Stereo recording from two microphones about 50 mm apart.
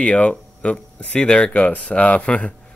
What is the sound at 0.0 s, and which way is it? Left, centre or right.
Speech, left.